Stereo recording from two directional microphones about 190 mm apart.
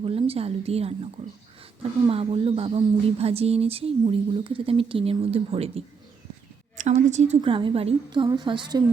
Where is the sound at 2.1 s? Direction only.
30° right (ahead or behind).